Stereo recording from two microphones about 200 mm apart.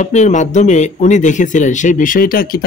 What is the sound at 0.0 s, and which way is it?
Speech, 35° left (ahead or behind).